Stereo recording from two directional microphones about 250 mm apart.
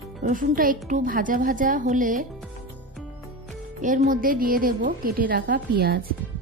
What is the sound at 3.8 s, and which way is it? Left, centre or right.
A woman's voice, right.